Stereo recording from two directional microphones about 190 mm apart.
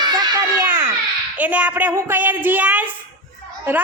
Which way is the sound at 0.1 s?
20° right (ahead or behind).